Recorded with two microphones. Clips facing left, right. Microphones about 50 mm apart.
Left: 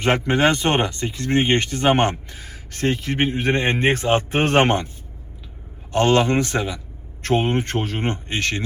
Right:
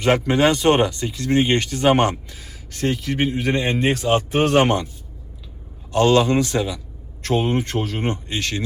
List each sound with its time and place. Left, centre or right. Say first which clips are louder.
0.0 s speech: right 1 dB; left
5.9 s speech: right 1 dB; left